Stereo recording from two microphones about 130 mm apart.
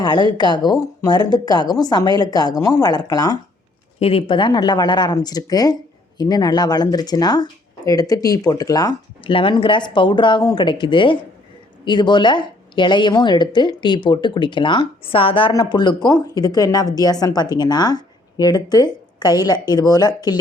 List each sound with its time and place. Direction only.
0.0 s speech: 35° left (ahead or behind)
4.0 s speech: 45° left (ahead or behind); by 20.4 s 30° left (ahead or behind)